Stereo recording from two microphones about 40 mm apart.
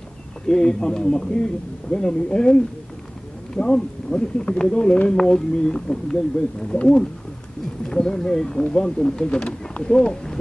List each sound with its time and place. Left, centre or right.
0.5 s a man's voice: centre